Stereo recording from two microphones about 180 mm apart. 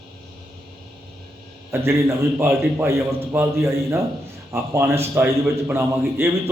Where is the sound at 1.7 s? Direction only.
15° right (ahead or behind).